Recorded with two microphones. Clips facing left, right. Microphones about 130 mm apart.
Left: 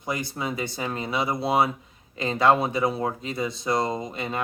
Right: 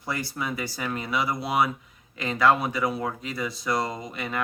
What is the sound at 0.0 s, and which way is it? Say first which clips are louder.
Speech: left 2 dB; 20° left (ahead or behind).